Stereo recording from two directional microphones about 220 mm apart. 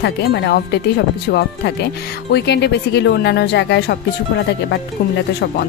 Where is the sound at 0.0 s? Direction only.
50° left (ahead or behind).